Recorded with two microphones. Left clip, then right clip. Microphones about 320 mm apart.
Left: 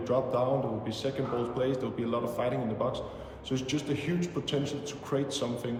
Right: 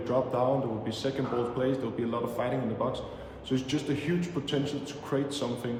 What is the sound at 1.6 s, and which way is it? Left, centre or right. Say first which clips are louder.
A man's voice: right 1 dB; centre.